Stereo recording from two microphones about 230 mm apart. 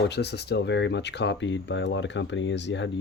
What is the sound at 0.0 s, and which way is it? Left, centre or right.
Speech, left.